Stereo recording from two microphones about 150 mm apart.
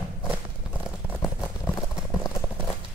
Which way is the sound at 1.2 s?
15° left (ahead or behind).